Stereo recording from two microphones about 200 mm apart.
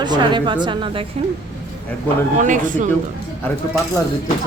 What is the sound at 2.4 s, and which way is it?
Speech, 40° right (ahead or behind).